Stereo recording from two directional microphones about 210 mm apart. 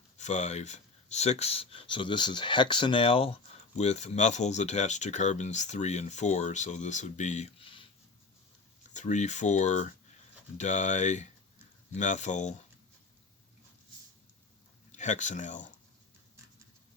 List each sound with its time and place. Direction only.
0.2 s speech: 35° left (ahead or behind)
8.9 s speech: 35° left (ahead or behind)
14.9 s speech: 35° left (ahead or behind)